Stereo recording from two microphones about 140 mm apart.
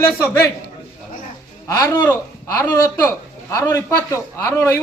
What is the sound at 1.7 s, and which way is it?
A man's voice, 20° left (ahead or behind).